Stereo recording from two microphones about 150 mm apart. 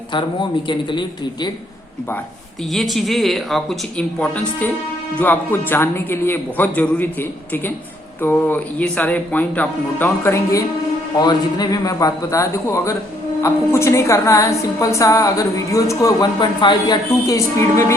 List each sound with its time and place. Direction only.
0.1 s speech: 30° left (ahead or behind)
2.7 s a man's voice: centre (ahead or behind); by 17.9 s 20° left (ahead or behind)